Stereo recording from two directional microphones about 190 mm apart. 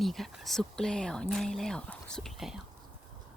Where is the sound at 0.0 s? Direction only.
Centre (ahead or behind).